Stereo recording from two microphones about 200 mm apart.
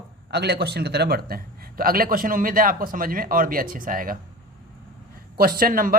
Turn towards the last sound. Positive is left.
turn(degrees=-45)  # may be behind; listen again after turning